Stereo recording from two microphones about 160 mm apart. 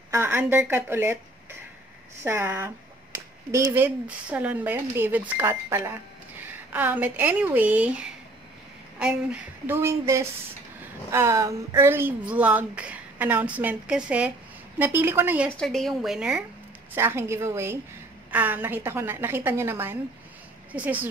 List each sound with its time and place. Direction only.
0.1 s a woman's voice: 10° right (ahead or behind)
15.6 s a woman's voice: centre (ahead or behind)